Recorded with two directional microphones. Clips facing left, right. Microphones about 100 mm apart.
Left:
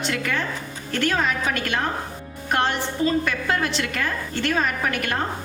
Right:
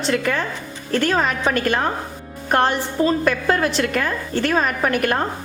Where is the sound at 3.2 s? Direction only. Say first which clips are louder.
Right 5 dB; 45° right (ahead or behind).